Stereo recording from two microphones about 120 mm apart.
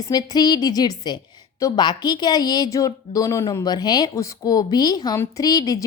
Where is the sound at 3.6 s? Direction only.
35° left (ahead or behind).